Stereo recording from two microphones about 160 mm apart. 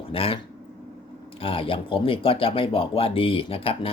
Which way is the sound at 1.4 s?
35° left (ahead or behind).